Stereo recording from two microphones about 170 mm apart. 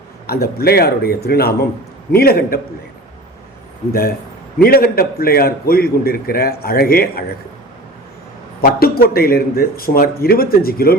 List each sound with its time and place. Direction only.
0.3 s a man's voice: 65° left (ahead or behind)
4.6 s a man's voice: 60° left (ahead or behind)
8.6 s a man's voice: 60° left (ahead or behind)